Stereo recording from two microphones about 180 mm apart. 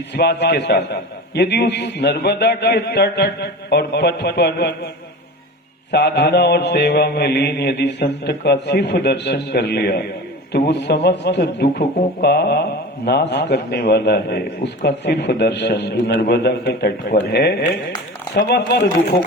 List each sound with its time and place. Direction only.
0.1 s a man's voice: 70° left (ahead or behind)
5.9 s a man's voice: 65° left (ahead or behind)